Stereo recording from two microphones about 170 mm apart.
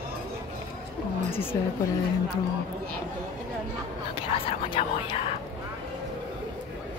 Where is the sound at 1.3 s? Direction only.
15° left (ahead or behind).